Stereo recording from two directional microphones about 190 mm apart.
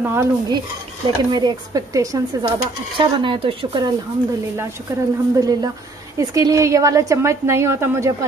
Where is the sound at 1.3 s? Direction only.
20° right (ahead or behind).